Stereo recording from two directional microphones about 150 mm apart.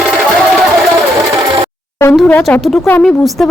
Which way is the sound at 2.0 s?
15° left (ahead or behind).